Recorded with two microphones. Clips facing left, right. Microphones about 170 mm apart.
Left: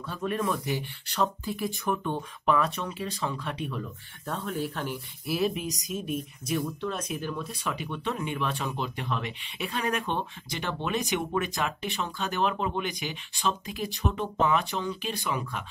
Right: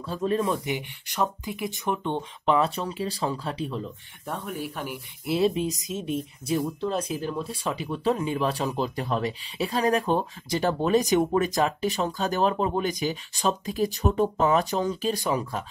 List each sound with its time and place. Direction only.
0.0 s speech: 30° right (ahead or behind)
4.3 s speech: 10° right (ahead or behind)
5.2 s speech: 25° right (ahead or behind)